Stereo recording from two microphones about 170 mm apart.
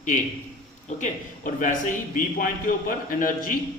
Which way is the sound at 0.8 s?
45° left (ahead or behind).